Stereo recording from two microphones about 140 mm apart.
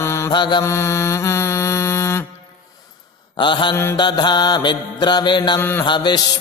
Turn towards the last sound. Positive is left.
turn(degrees=35)  # may be behind; listen again after turning